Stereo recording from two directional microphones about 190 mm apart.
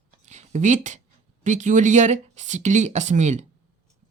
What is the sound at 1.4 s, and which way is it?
Speech, 40° right (ahead or behind).